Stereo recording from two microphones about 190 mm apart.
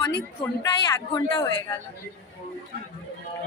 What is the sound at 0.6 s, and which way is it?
Speech, 25° left (ahead or behind).